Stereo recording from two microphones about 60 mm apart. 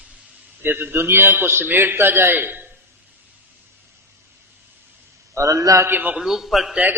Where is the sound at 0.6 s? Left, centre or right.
Right.